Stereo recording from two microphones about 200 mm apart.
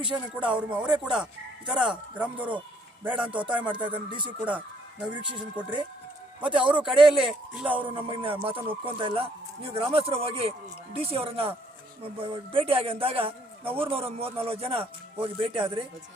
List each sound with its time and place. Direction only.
0.0 s speech: 5° right (ahead or behind)
3.7 s speech: 25° right (ahead or behind)
4.3 s speech: 10° right (ahead or behind)
5.0 s speech: 25° right (ahead or behind)
6.6 s speech: 5° right (ahead or behind)
7.9 s speech: 25° right (ahead or behind)